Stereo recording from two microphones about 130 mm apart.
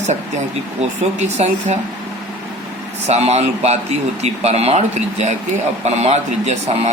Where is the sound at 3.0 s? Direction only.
55° right (ahead or behind).